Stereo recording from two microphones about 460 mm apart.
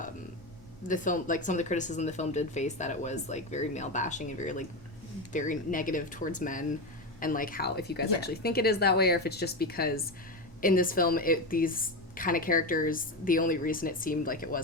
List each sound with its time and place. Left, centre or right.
0.9 s a woman's voice: centre